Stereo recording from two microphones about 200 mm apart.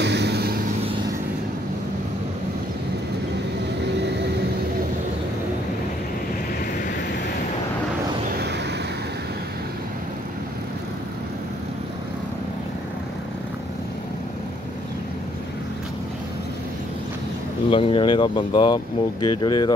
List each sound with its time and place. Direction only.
0.0 s vehicle: 60° right (ahead or behind)
4.0 s vehicle: 55° right (ahead or behind)
17.6 s speech: 25° left (ahead or behind)